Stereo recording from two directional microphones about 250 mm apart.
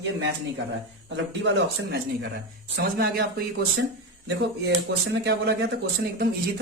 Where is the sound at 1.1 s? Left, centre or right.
Right.